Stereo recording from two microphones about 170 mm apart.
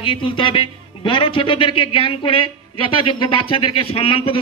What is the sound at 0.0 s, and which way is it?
Speech, 30° left (ahead or behind).